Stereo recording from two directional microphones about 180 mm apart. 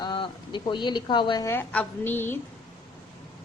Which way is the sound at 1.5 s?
10° left (ahead or behind).